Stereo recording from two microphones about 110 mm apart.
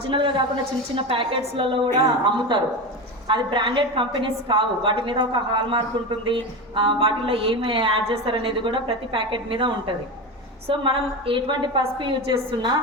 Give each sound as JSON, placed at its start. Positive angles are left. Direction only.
{"t": 0.1, "sound": "a woman's voice", "side_deg": -50}